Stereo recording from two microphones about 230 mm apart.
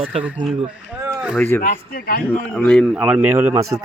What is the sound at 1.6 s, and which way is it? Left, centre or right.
Speech, left.